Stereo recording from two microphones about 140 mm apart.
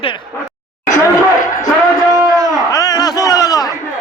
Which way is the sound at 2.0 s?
25° right (ahead or behind).